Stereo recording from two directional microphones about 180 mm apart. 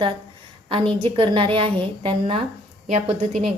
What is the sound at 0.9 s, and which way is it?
A woman's voice, 30° right (ahead or behind).